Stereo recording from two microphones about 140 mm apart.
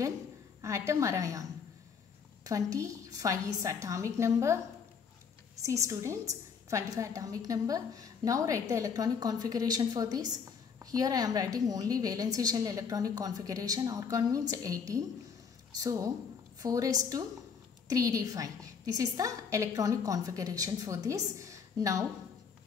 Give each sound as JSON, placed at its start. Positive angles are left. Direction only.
{"t": 0.6, "sound": "a woman's voice", "side_deg": -20}
{"t": 2.4, "sound": "a woman's voice", "side_deg": -25}
{"t": 5.6, "sound": "a woman's voice", "side_deg": -20}